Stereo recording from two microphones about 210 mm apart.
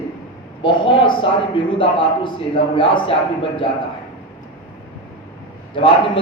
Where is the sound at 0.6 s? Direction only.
25° left (ahead or behind).